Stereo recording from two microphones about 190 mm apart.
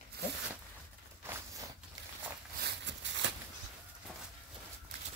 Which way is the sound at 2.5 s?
65° right (ahead or behind).